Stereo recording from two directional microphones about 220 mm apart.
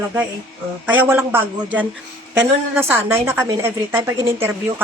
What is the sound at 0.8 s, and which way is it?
A woman's voice, 10° right (ahead or behind).